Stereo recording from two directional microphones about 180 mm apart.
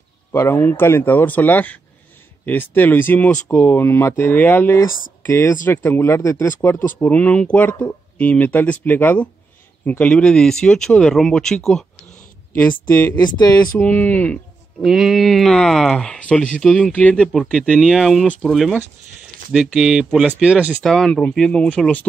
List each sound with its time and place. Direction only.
0.3 s speech: 15° left (ahead or behind)
13.1 s speech: 25° left (ahead or behind)
13.7 s speech: 10° left (ahead or behind)